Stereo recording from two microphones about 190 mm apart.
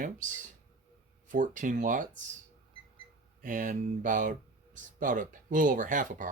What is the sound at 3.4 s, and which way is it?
Speech, 45° right (ahead or behind).